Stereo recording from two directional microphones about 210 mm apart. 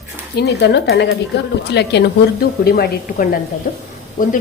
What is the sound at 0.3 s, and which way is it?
A woman's voice, 50° left (ahead or behind).